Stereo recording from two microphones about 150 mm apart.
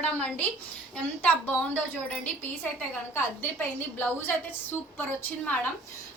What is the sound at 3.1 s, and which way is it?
A woman's voice, 15° left (ahead or behind).